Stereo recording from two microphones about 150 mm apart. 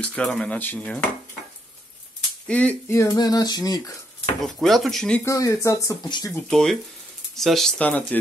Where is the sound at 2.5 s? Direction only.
10° left (ahead or behind).